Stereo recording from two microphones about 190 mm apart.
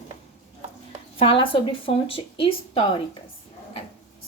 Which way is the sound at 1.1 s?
30° left (ahead or behind).